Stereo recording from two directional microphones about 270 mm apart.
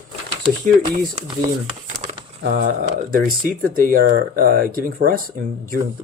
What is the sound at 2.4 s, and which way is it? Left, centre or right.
Speech, right.